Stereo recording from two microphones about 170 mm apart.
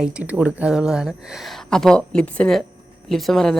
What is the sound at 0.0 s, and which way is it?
A woman's voice, 5° right (ahead or behind).